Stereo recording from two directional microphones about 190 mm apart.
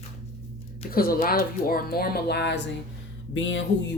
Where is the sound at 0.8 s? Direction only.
50° left (ahead or behind).